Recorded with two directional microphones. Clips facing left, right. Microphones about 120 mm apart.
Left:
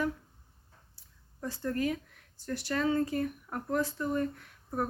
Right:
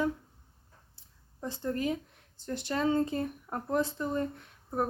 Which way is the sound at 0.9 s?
20° right (ahead or behind).